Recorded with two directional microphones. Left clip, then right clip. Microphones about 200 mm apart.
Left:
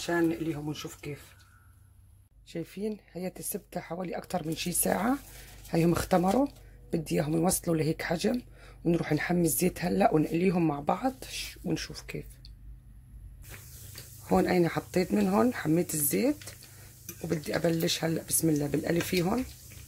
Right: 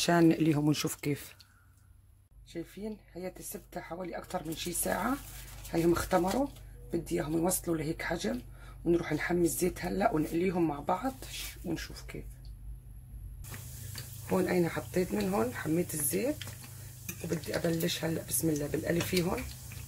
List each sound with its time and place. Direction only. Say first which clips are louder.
0.0 s speech: right 3 dB; 55° right (ahead or behind)
2.4 s speech: left 5 dB; 45° left (ahead or behind)
14.3 s speech: left 4 dB; 50° left (ahead or behind)